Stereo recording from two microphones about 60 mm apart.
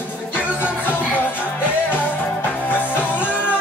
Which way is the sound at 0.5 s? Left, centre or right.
Left.